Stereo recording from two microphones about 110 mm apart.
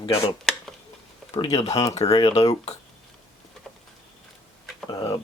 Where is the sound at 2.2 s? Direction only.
75° left (ahead or behind).